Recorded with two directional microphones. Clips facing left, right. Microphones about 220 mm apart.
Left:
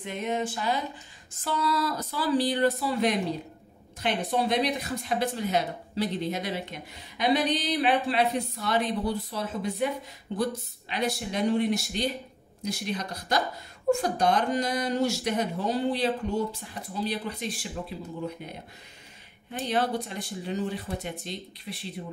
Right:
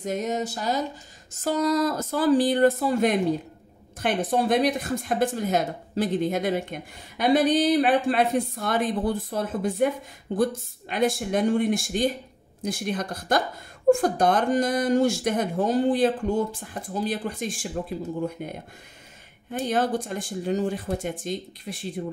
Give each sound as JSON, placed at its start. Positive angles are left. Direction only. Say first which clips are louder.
{"t": 0.0, "sound": "a sound", "louder": "right 3 dB", "side_deg": -40}
{"t": 1.3, "sound": "speech", "louder": "right 6 dB", "side_deg": -45}
{"t": 19.5, "sound": "speech", "louder": "right 3 dB", "side_deg": -45}